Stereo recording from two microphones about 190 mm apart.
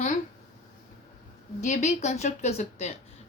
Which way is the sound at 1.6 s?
40° left (ahead or behind).